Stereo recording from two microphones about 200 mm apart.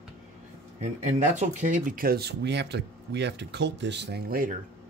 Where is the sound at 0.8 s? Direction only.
35° right (ahead or behind).